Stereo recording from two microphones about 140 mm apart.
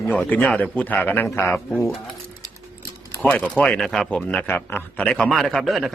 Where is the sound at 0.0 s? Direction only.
10° left (ahead or behind).